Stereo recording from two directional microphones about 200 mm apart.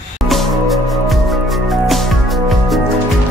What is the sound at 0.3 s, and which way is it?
Music, centre (ahead or behind).